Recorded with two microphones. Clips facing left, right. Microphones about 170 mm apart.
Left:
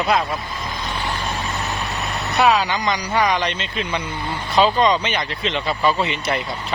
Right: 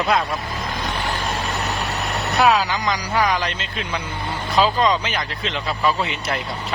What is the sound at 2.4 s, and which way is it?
Speech, centre (ahead or behind).